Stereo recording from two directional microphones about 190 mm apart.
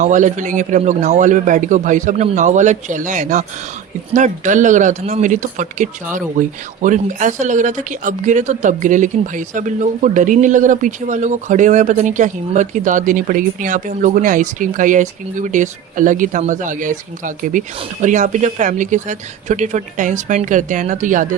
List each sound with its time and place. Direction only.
0.0 s speech: 40° right (ahead or behind)